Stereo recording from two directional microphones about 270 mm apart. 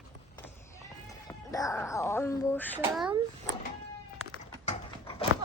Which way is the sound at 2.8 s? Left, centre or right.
Centre.